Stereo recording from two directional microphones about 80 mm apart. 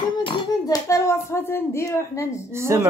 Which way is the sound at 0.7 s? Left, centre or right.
Left.